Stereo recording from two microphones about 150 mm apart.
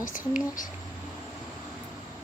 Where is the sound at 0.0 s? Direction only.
65° left (ahead or behind).